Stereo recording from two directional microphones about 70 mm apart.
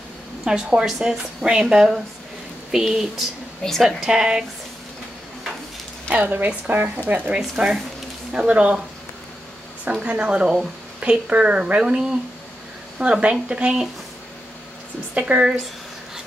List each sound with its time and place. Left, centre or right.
0.5 s speech: centre
4.0 s speech: centre
6.1 s a woman's voice: right
7.3 s speech: centre
10.0 s speech: centre
15.1 s a woman's voice: centre